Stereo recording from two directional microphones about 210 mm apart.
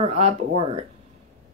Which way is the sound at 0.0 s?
30° right (ahead or behind).